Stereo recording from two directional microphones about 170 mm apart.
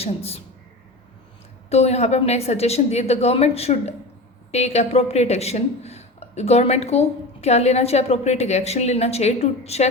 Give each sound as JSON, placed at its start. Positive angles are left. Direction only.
{"t": 0.0, "sound": "a woman's voice", "side_deg": 35}
{"t": 1.7, "sound": "a woman's voice", "side_deg": 40}